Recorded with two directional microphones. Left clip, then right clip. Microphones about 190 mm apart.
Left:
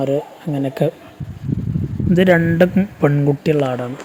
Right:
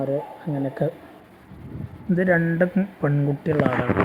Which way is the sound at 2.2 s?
55° left (ahead or behind).